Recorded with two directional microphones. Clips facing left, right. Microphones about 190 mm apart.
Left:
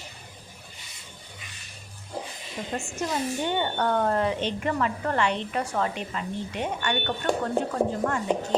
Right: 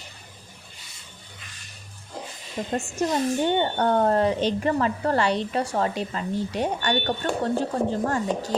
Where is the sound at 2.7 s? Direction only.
35° right (ahead or behind).